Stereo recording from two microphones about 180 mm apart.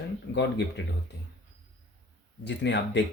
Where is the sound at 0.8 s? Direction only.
80° left.